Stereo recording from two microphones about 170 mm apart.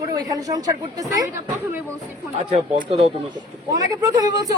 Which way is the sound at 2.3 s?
35° right (ahead or behind).